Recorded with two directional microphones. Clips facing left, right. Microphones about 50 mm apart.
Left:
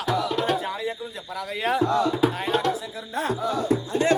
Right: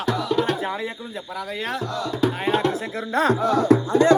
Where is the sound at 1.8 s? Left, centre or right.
Left.